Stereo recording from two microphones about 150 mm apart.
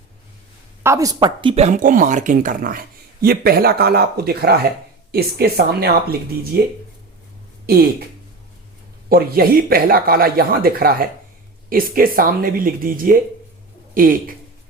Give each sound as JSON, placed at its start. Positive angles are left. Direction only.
{"t": 0.8, "sound": "speech", "side_deg": -20}
{"t": 1.2, "sound": "speech", "side_deg": -35}
{"t": 1.6, "sound": "speech", "side_deg": -60}
{"t": 9.0, "sound": "speech", "side_deg": -85}